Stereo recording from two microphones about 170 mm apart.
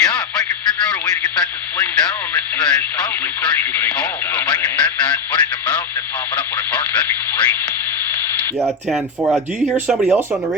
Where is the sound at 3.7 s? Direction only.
5° left (ahead or behind).